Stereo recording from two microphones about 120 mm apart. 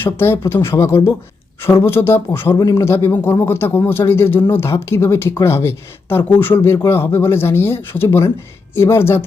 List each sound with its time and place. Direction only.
0.0 s speech: 20° left (ahead or behind)